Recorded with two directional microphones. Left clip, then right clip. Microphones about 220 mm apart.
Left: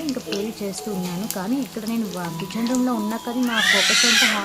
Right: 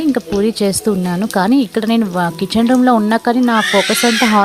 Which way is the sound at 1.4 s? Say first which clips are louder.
Right 15 dB; 45° right (ahead or behind).